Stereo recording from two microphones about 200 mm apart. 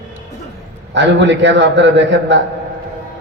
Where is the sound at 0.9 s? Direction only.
65° right (ahead or behind).